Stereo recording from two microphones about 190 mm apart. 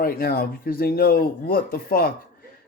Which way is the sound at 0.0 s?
50° left (ahead or behind).